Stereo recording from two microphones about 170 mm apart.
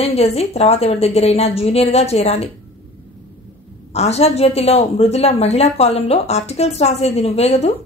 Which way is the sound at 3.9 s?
40° left (ahead or behind).